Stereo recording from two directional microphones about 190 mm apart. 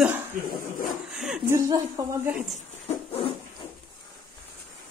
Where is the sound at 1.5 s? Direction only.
15° right (ahead or behind).